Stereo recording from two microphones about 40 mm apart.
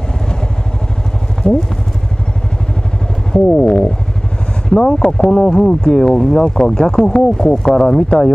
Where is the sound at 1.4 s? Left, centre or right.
Left.